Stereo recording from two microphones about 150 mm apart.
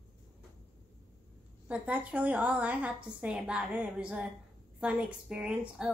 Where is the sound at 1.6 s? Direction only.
10° right (ahead or behind).